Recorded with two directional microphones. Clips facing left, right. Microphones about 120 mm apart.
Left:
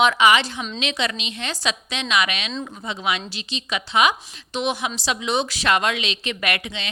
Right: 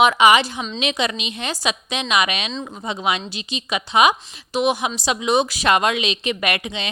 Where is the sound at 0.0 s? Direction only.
15° right (ahead or behind).